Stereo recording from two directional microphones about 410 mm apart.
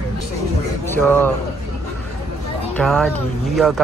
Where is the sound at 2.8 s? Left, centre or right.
Centre.